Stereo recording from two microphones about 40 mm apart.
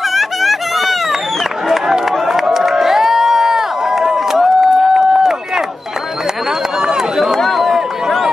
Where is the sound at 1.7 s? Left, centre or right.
Centre.